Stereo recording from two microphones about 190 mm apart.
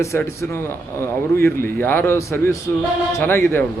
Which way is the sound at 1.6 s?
10° left (ahead or behind).